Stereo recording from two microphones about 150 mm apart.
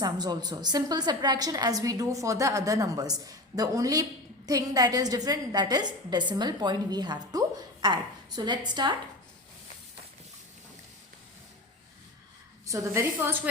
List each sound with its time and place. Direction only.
0.0 s a woman's voice: 25° right (ahead or behind)
12.6 s a woman's voice: 20° right (ahead or behind)